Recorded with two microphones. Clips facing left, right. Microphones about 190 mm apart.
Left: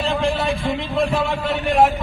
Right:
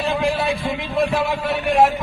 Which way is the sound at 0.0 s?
10° right (ahead or behind).